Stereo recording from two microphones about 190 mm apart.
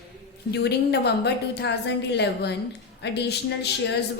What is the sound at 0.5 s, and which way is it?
Speech, 60° left (ahead or behind).